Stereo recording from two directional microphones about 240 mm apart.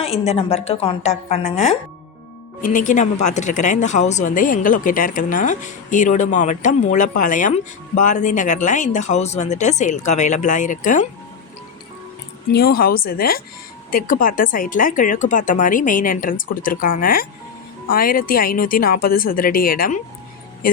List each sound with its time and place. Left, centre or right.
0.0 s a woman's voice: left
12.5 s speech: left